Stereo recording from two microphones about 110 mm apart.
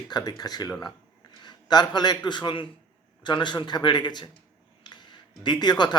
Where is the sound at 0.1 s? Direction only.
35° left (ahead or behind).